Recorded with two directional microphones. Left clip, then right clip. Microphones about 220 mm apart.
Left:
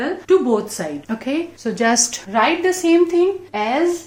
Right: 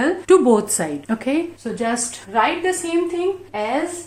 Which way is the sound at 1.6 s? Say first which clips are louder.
Left 5 dB; 30° left (ahead or behind).